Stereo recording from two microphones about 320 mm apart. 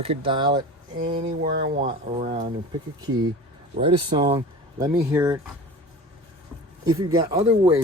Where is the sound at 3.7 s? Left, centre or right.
Centre.